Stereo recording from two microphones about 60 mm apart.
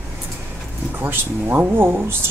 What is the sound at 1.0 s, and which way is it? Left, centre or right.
Speech, right.